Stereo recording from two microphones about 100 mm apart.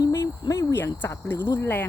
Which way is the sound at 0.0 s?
35° left (ahead or behind).